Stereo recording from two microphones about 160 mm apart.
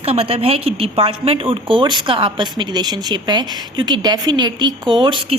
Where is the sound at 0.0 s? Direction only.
40° right (ahead or behind).